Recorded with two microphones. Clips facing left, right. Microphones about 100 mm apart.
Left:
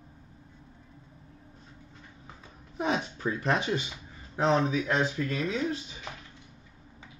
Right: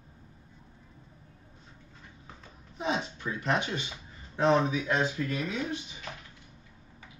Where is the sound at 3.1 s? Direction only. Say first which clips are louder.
Left 2 dB; 30° left (ahead or behind).